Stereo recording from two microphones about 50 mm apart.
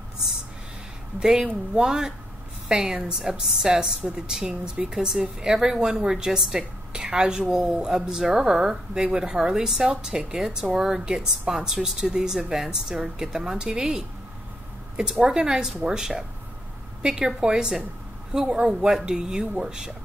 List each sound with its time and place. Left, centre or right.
1.2 s a woman's voice: centre